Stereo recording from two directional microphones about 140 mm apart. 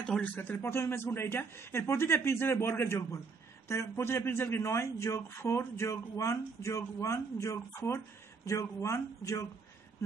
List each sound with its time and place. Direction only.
0.0 s a man's voice: 10° left (ahead or behind)